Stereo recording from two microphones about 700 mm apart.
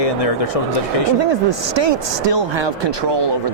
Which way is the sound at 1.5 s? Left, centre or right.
Right.